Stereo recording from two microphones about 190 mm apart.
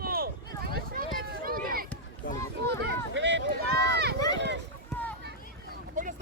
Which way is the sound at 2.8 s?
70° right (ahead or behind).